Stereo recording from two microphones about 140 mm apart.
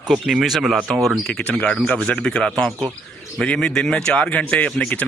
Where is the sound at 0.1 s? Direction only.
Centre (ahead or behind).